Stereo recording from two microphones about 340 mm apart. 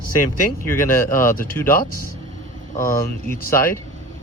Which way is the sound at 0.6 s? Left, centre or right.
Centre.